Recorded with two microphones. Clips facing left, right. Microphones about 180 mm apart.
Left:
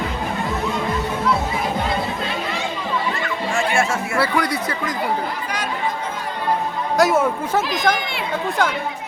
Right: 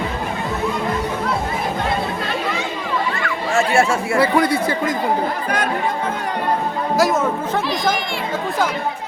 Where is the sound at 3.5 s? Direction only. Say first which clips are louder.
Right 5 dB; 40° right (ahead or behind).